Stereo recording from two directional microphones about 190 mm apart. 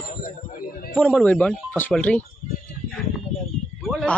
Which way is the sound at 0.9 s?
5° left (ahead or behind).